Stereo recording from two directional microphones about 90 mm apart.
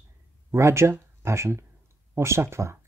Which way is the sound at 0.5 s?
30° right (ahead or behind).